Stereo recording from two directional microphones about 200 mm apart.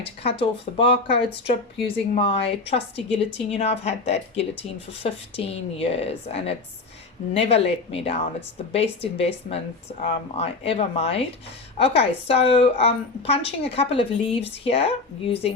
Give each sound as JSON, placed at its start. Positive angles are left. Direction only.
{"t": 0.0, "sound": "a woman's voice", "side_deg": 25}